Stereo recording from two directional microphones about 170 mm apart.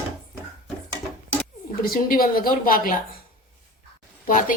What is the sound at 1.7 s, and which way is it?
A woman's voice, 60° left (ahead or behind).